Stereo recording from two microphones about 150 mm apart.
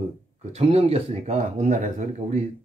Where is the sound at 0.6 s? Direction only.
45° right (ahead or behind).